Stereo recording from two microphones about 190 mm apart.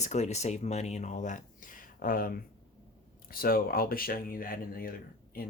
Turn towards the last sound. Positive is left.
turn(degrees=50)  # may be behind; listen again after turning